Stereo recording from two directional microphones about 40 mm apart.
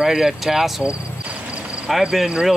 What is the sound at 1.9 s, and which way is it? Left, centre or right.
Speech, centre.